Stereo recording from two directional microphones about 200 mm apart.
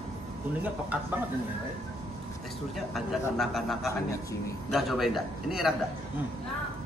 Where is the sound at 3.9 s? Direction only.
15° left (ahead or behind).